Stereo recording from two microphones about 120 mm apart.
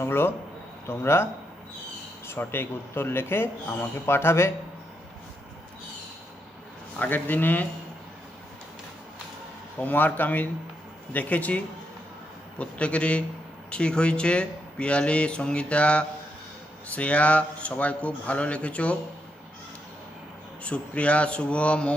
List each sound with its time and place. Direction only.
0.0 s speech: 20° left (ahead or behind)
7.0 s speech: 15° left (ahead or behind)
9.8 s speech: 15° left (ahead or behind)
20.6 s speech: 10° left (ahead or behind)